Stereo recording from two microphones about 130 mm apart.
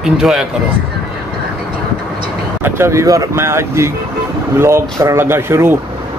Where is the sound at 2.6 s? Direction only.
20° right (ahead or behind).